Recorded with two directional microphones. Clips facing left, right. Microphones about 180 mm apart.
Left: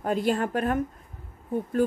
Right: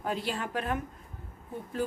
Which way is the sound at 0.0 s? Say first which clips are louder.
Left 8 dB; 50° left (ahead or behind).